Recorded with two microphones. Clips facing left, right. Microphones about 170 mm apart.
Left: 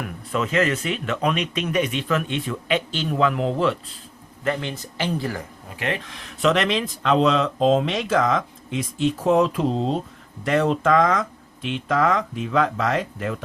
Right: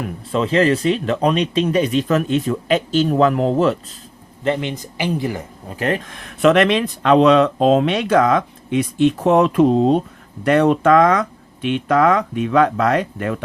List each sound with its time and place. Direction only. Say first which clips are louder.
0.0 s speech: right 5 dB; 30° right (ahead or behind)
4.4 s speech: right 5 dB; 20° right (ahead or behind)
5.6 s speech: right 7 dB; 40° right (ahead or behind); by 13.4 s 60° right (ahead or behind)